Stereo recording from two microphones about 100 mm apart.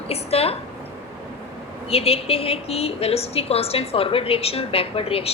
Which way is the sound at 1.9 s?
80° left.